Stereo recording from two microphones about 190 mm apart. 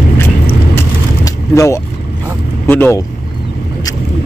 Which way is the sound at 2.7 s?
10° left (ahead or behind).